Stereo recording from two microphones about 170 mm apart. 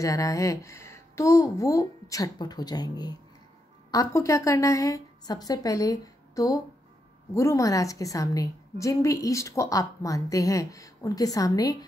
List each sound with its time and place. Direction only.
0.0 s a woman's voice: 20° left (ahead or behind)